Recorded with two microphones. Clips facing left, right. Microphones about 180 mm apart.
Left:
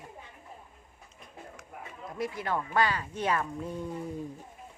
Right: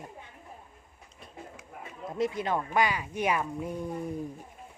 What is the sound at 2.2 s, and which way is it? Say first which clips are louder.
Speech: right 3 dB; 20° right (ahead or behind).